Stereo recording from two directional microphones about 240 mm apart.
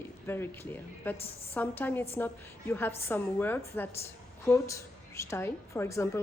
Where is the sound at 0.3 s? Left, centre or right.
Centre.